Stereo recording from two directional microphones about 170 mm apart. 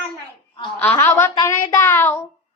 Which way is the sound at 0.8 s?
10° left (ahead or behind).